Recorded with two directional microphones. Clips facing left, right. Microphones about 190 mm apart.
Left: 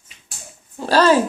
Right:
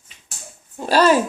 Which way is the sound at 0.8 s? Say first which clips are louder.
Left 1 dB; 15° right (ahead or behind).